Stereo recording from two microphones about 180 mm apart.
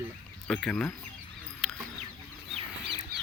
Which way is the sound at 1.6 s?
Centre (ahead or behind).